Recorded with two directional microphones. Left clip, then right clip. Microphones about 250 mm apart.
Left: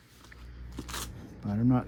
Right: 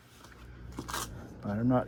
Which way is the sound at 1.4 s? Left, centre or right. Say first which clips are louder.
Even; left.